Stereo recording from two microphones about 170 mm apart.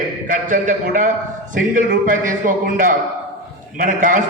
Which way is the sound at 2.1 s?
50° right (ahead or behind).